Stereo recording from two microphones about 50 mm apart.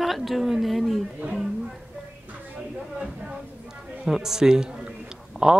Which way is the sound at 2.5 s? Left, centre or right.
Centre.